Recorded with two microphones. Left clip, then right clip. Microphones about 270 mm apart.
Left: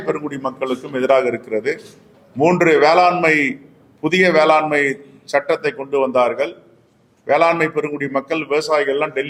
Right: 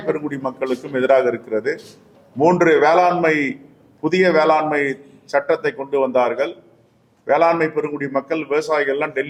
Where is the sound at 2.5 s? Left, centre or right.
Left.